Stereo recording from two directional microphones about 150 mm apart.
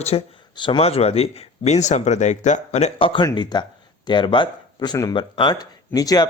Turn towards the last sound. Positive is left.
turn(degrees=25)  # may be behind; listen again after turning